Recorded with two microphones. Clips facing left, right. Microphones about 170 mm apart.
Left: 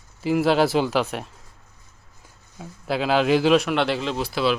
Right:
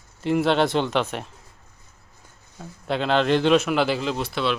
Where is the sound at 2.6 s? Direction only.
5° left (ahead or behind).